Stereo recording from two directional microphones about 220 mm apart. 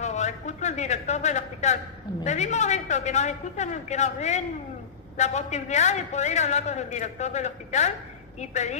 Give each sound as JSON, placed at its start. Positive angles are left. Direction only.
{"t": 0.0, "sound": "a man's voice", "side_deg": 30}